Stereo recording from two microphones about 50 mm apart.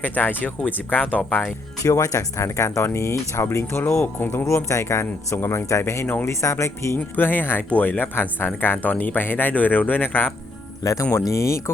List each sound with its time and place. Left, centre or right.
0.0 s speech: left
1.9 s speech: left
4.4 s speech: left
6.9 s speech: left
8.8 s speech: left
11.1 s speech: left